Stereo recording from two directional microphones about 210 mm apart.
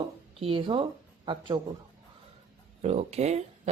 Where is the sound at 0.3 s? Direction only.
25° right (ahead or behind).